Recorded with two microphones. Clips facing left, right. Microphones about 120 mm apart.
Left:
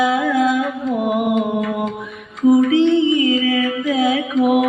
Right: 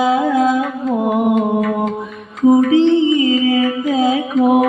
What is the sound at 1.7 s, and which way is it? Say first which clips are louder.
Music: right 4 dB; 30° right (ahead or behind).